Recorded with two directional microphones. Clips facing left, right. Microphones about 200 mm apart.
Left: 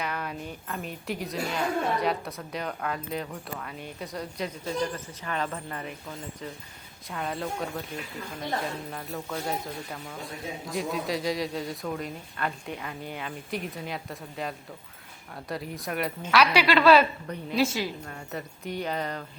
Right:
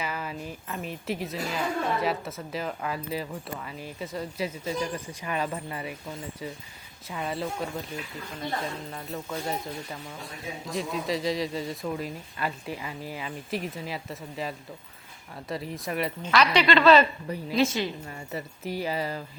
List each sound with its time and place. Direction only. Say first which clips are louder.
0.0 s speech: even; 5° right (ahead or behind)
7.1 s speech: right 1 dB; 5° right (ahead or behind)
8.9 s a woman's voice: even; centre (ahead or behind)
18.0 s speech: right 1 dB; 5° right (ahead or behind)